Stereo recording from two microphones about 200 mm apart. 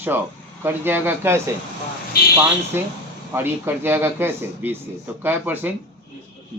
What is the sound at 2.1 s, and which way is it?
Speech, 50° left (ahead or behind).